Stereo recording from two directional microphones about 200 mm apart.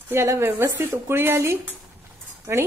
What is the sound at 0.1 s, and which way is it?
A woman's voice, 10° right (ahead or behind).